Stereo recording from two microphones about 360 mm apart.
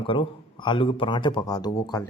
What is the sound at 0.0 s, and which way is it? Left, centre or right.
Speech, centre.